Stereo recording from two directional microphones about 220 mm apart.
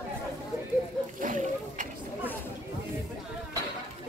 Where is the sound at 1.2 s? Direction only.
35° right (ahead or behind).